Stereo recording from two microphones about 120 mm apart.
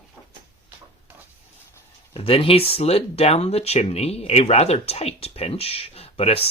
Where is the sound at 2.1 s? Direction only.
50° left (ahead or behind).